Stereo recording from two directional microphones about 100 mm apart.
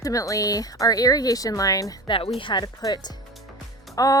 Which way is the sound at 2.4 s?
50° left (ahead or behind).